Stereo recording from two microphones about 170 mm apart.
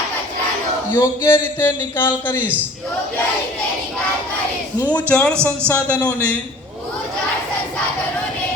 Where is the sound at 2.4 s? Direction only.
10° right (ahead or behind).